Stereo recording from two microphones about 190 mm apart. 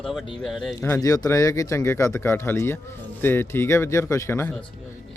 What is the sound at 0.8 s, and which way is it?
Speech, 15° left (ahead or behind).